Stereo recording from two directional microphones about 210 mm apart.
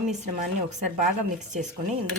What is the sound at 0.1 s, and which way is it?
A woman's voice, 35° right (ahead or behind).